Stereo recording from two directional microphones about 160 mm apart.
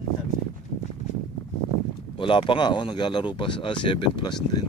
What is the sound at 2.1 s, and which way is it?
Speech, 30° left (ahead or behind).